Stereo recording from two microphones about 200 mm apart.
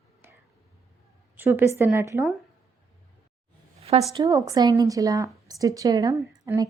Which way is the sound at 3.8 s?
30° right (ahead or behind).